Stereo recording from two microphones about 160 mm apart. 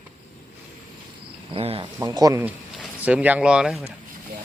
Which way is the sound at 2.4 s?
10° right (ahead or behind).